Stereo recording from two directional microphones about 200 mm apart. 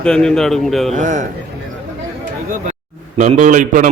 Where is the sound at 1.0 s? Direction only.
40° right (ahead or behind).